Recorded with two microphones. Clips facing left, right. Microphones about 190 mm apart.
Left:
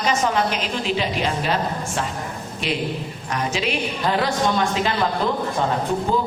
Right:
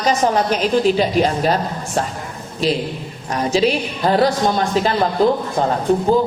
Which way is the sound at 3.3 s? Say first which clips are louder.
Right 7 dB; 35° right (ahead or behind).